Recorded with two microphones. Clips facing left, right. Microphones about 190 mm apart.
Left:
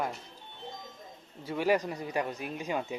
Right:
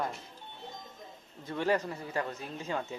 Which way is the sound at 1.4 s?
10° left (ahead or behind).